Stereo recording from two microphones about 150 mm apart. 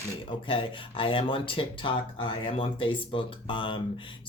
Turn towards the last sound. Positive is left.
turn(degrees=35)  # may be behind; listen again after turning